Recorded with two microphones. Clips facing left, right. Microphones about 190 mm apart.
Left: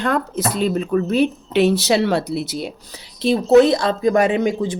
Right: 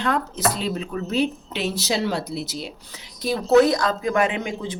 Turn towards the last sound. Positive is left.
turn(degrees=40)  # may be behind; listen again after turning